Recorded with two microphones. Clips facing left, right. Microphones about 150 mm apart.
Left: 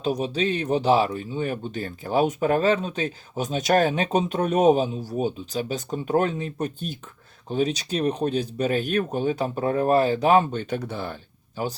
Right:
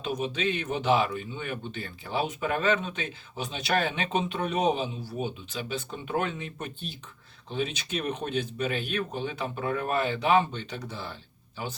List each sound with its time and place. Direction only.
0.0 s speech: 35° left (ahead or behind)